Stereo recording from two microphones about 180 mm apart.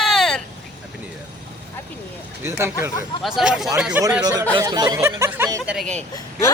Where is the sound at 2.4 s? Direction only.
15° right (ahead or behind).